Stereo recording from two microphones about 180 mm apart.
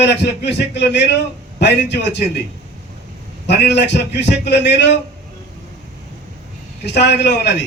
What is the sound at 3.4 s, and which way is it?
A man's voice, 70° left (ahead or behind).